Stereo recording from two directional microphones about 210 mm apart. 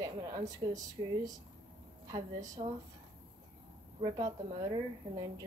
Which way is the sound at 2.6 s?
30° right (ahead or behind).